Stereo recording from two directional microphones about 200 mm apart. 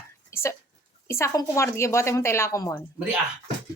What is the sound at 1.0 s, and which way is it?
Speech, 15° left (ahead or behind).